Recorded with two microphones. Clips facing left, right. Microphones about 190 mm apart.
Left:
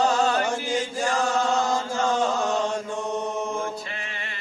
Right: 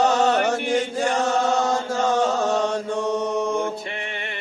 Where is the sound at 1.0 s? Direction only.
35° right (ahead or behind).